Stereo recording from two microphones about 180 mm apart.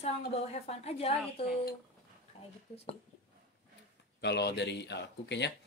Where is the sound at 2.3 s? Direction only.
35° left (ahead or behind).